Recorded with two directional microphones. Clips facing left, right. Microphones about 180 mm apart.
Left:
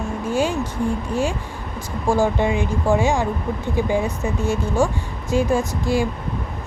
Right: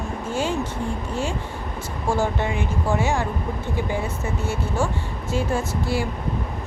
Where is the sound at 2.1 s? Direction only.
15° left (ahead or behind).